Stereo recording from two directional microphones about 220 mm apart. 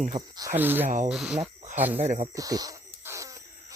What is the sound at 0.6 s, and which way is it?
Speech, 10° right (ahead or behind).